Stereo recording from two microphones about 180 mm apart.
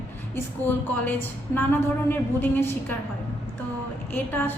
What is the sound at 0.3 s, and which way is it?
A woman's voice, 10° left (ahead or behind).